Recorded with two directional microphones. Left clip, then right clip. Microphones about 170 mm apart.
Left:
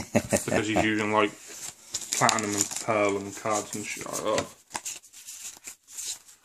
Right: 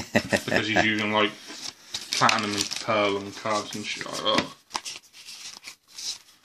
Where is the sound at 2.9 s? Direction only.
35° right (ahead or behind).